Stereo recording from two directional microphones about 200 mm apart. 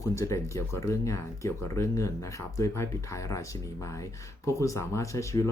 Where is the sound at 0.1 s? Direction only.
15° left (ahead or behind).